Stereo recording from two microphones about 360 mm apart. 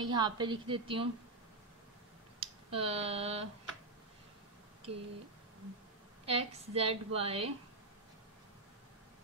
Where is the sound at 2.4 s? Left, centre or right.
Centre.